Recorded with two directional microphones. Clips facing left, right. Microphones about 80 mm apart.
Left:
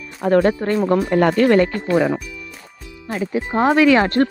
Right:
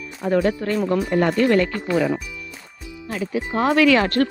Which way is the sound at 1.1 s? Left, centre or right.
Left.